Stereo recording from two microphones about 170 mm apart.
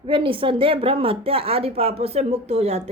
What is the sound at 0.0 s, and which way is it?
A woman's voice, 30° right (ahead or behind).